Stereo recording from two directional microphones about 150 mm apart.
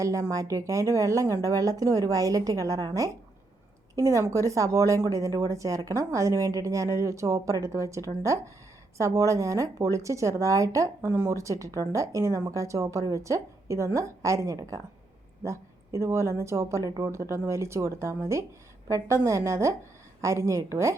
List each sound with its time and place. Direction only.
0.0 s speech: 20° right (ahead or behind)